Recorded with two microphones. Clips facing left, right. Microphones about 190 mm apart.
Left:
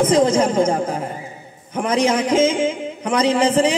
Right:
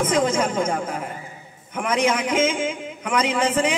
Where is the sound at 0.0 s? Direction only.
35° left (ahead or behind).